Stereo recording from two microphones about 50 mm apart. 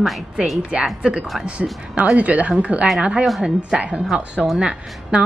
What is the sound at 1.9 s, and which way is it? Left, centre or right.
Speech, right.